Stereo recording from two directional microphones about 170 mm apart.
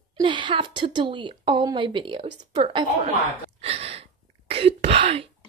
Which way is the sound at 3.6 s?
35° right (ahead or behind).